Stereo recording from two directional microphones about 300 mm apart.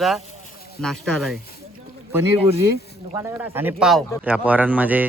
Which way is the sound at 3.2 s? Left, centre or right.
Centre.